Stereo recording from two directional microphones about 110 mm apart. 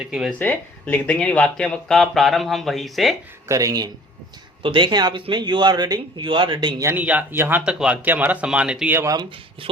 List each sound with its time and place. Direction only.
0.0 s speech: 5° right (ahead or behind)
0.3 s speech: 15° left (ahead or behind); by 3.2 s centre (ahead or behind)
3.5 s speech: 30° right (ahead or behind)
4.6 s a man's voice: 50° right (ahead or behind)
6.9 s speech: 15° right (ahead or behind)
8.9 s speech: 20° right (ahead or behind)